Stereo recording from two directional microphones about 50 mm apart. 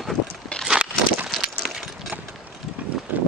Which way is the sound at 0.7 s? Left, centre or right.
Right.